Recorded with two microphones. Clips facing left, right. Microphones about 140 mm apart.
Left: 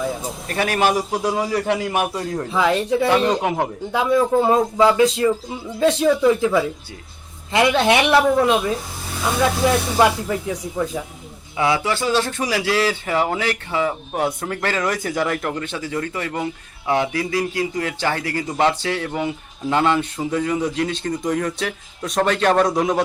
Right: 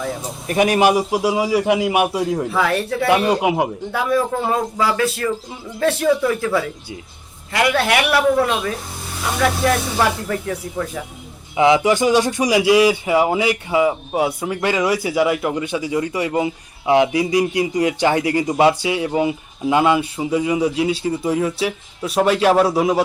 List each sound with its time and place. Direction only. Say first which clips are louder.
0.4 s speech: right 5 dB; 15° right (ahead or behind)
2.5 s speech: left 1 dB; 20° left (ahead or behind)
3.1 s speech: right 6 dB; 10° right (ahead or behind)
3.9 s speech: left 3 dB; 20° left (ahead or behind)
11.5 s speech: right 6 dB; 20° right (ahead or behind)